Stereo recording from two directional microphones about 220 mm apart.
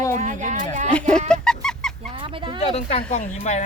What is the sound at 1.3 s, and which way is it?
Goose, 5° left (ahead or behind).